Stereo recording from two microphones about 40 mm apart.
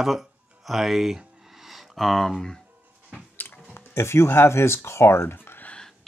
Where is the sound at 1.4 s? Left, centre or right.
Centre.